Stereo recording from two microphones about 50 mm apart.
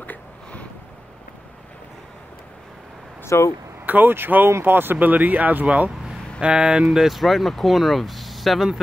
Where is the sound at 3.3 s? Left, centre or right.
Left.